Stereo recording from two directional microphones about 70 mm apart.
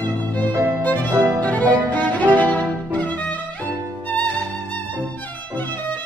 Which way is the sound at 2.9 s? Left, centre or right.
Left.